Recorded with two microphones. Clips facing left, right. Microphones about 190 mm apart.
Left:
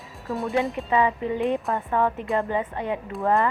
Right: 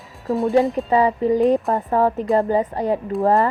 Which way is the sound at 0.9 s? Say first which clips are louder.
Right 4 dB; 40° right (ahead or behind).